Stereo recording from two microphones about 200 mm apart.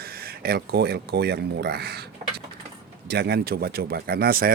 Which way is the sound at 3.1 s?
55° right (ahead or behind).